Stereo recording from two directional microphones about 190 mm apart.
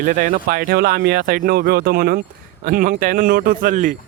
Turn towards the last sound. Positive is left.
turn(degrees=-45)  # may be behind; listen again after turning